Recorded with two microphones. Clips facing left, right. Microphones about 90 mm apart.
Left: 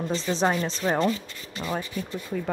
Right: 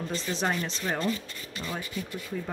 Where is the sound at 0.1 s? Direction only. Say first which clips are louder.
Left 6 dB; 30° left (ahead or behind).